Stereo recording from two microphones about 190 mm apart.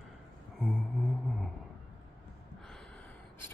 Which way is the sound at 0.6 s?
5° left (ahead or behind).